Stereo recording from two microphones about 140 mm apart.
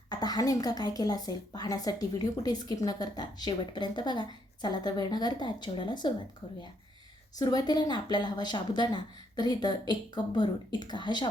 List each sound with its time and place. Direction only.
0.1 s a woman's voice: 30° left (ahead or behind)
7.3 s speech: 30° left (ahead or behind)